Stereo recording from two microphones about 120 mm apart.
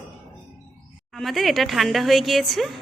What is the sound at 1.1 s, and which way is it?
A woman's voice, centre (ahead or behind).